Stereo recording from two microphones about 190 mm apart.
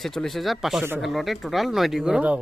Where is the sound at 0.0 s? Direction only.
Centre (ahead or behind).